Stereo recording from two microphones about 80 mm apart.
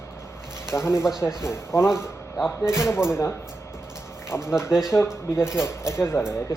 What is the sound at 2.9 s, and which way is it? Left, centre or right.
Speech, left.